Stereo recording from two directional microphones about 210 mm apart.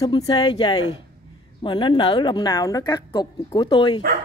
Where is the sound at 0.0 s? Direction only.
20° left (ahead or behind).